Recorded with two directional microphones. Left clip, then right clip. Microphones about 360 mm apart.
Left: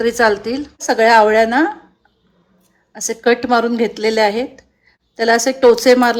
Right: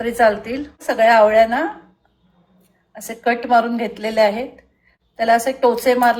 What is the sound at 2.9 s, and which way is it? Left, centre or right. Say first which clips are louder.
A woman's voice: left 5 dB; centre.